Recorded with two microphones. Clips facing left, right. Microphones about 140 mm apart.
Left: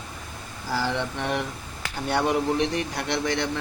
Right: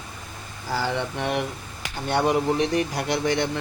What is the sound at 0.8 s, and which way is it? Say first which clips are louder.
A man's voice: right 1 dB; 5° right (ahead or behind).